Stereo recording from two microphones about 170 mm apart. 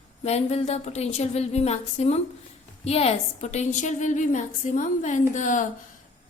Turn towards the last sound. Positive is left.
turn(degrees=45)  # may be behind; listen again after turning